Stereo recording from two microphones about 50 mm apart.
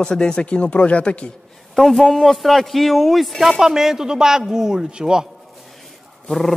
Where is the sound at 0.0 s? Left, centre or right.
Centre.